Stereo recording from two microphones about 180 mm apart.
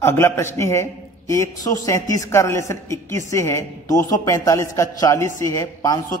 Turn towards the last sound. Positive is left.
turn(degrees=20)  # may be behind; listen again after turning